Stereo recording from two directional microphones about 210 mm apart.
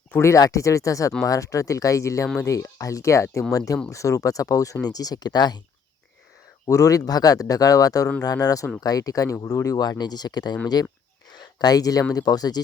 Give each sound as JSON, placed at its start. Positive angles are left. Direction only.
{"t": 0.1, "sound": "speech", "side_deg": 15}
{"t": 6.7, "sound": "speech", "side_deg": 15}